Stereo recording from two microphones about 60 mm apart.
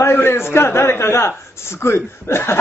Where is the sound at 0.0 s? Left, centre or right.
Left.